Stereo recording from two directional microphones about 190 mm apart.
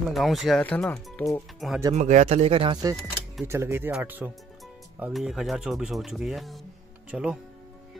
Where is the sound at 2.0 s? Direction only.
40° right (ahead or behind); by 7.3 s 5° right (ahead or behind).